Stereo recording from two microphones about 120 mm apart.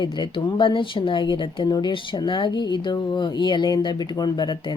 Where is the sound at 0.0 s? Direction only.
40° left (ahead or behind).